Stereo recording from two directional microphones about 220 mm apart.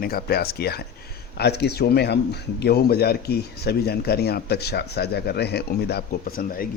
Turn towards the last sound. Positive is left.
turn(degrees=40)  # may be behind; listen again after turning